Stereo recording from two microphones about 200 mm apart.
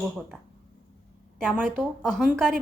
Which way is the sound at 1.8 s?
5° left (ahead or behind).